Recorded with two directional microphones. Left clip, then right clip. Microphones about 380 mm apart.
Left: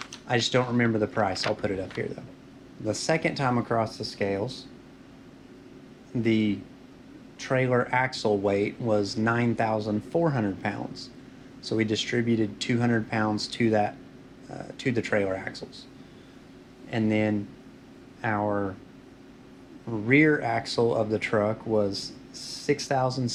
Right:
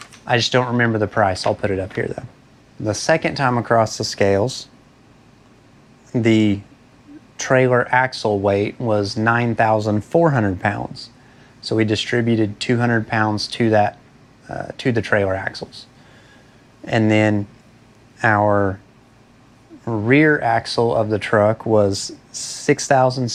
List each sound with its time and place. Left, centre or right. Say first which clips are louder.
0.3 s speech: right 8 dB; right
6.2 s speech: right 9 dB; right
16.8 s speech: right 10 dB; right
19.8 s speech: right 7 dB; right